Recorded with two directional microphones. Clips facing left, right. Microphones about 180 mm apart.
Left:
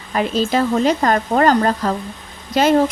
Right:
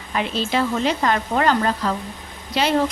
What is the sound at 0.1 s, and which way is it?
A woman's voice, 45° left (ahead or behind).